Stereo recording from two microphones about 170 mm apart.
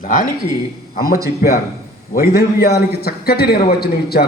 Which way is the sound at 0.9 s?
65° left (ahead or behind).